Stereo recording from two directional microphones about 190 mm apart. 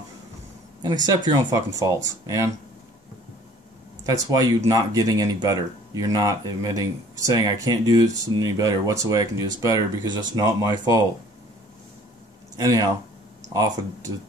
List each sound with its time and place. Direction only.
1.0 s speech: 20° right (ahead or behind)
4.0 s speech: 20° right (ahead or behind)
12.5 s speech: 15° right (ahead or behind)